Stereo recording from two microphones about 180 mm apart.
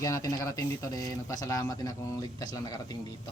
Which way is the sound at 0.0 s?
20° left (ahead or behind).